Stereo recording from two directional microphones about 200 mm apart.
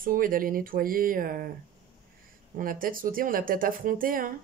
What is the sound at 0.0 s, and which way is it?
Speech, 45° right (ahead or behind).